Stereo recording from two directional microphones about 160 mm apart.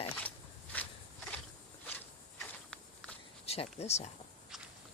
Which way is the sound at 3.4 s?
40° left (ahead or behind).